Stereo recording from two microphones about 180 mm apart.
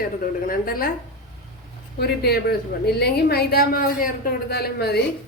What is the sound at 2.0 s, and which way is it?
A woman's voice, 60° left (ahead or behind).